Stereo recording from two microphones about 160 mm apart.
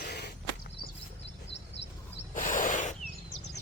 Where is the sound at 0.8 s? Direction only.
70° left (ahead or behind).